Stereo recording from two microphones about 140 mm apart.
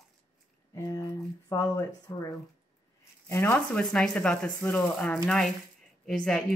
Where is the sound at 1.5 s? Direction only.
25° left (ahead or behind).